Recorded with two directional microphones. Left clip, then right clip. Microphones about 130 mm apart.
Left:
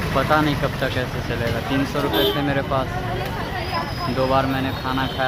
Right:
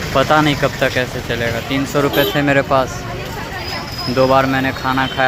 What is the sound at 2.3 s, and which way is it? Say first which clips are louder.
Speech: right 8 dB; 50° right (ahead or behind).